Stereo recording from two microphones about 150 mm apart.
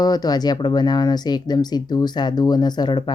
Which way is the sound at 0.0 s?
25° left (ahead or behind).